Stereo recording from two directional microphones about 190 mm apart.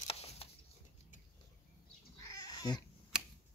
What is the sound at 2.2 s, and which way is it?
Cat, 20° left (ahead or behind).